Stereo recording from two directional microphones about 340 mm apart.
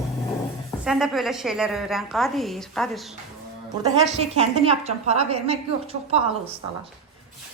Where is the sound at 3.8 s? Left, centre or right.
Centre.